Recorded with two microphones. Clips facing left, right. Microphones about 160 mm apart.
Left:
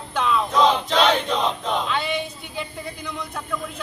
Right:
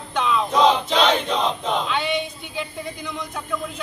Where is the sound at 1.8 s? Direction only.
Centre (ahead or behind).